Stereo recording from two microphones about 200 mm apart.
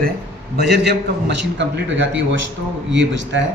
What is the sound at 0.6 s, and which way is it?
Speech, 55° right (ahead or behind).